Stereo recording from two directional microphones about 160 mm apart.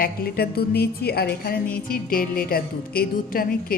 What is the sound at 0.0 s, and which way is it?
A woman's voice, 70° left (ahead or behind).